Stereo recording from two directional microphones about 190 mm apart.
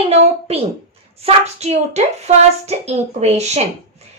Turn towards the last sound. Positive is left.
turn(degrees=-35)  # may be behind; listen again after turning